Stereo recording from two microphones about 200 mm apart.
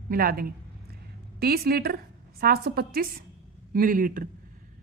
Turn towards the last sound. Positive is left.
turn(degrees=-45)  # may be behind; listen again after turning